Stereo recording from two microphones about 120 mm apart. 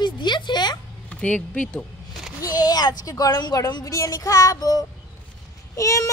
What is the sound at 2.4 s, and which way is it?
Speech, 30° left (ahead or behind).